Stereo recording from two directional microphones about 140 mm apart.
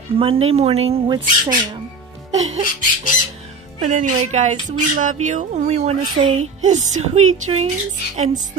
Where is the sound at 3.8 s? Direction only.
65° right (ahead or behind).